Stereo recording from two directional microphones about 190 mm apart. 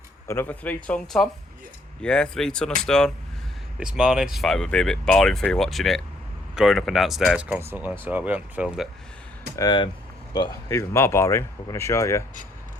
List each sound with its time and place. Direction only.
0.3 s speech: 10° left (ahead or behind)
9.6 s speech: 25° left (ahead or behind)